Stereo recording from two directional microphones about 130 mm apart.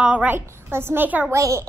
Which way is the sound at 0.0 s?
10° right (ahead or behind).